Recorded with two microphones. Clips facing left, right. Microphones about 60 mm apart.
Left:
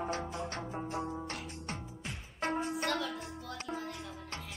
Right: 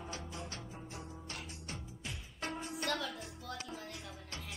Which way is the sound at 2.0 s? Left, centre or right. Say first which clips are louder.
Left 6 dB; left.